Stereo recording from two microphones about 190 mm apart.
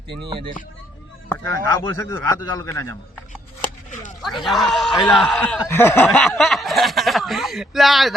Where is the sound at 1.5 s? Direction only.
15° left (ahead or behind).